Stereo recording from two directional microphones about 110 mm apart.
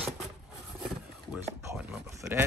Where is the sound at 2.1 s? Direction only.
30° right (ahead or behind).